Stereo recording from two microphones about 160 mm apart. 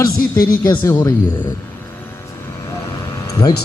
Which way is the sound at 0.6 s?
25° left (ahead or behind).